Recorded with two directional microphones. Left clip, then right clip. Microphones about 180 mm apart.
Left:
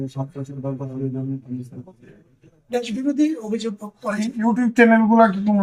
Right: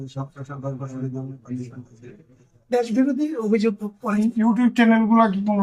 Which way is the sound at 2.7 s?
55° right (ahead or behind).